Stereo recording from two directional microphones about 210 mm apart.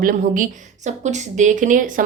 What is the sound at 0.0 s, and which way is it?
A woman's voice, 40° right (ahead or behind).